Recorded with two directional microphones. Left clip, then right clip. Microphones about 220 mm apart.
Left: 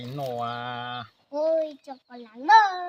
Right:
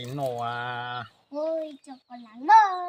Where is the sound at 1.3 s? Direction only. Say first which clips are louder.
Left 5 dB; 30° left (ahead or behind).